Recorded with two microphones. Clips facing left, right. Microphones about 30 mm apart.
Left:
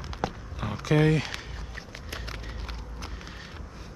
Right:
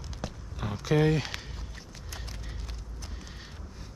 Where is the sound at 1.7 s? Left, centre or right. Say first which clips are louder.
Left 9 dB; left.